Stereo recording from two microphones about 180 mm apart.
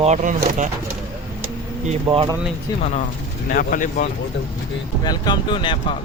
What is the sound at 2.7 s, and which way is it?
Speech, 20° left (ahead or behind).